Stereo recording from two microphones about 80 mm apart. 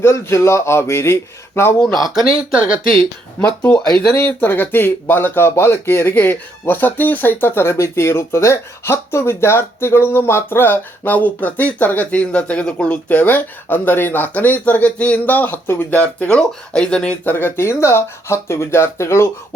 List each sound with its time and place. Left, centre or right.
0.0 s speech: left
1.8 s speech: centre
4.3 s speech: left
17.2 s speech: left